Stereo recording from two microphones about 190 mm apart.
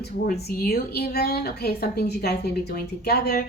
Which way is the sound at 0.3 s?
55° left (ahead or behind).